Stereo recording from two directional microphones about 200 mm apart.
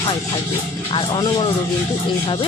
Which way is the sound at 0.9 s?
25° left (ahead or behind).